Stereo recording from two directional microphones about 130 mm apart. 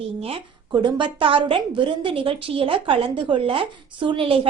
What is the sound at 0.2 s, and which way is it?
A woman's voice, 40° right (ahead or behind).